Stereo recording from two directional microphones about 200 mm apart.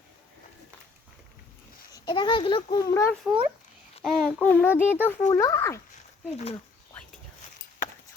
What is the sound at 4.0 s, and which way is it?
A child's voice, centre (ahead or behind).